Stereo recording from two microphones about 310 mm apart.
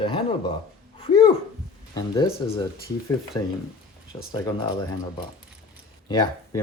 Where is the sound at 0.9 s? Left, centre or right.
Centre.